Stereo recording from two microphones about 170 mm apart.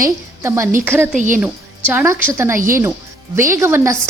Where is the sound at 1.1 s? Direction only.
50° right (ahead or behind).